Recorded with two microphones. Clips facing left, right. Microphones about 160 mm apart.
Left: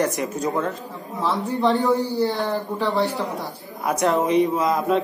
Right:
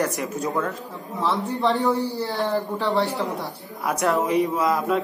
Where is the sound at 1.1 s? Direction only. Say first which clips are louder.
Left 1 dB; centre (ahead or behind).